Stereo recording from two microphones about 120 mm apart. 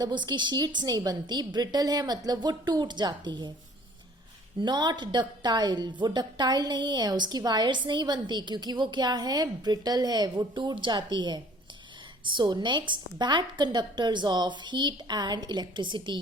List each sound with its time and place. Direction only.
0.0 s a woman's voice: 40° right (ahead or behind)
4.6 s a woman's voice: 35° right (ahead or behind)